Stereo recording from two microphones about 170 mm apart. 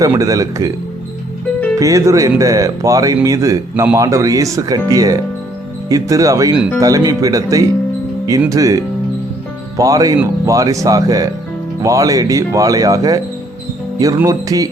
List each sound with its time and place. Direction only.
0.0 s speech: 20° right (ahead or behind)
1.8 s speech: 20° right (ahead or behind)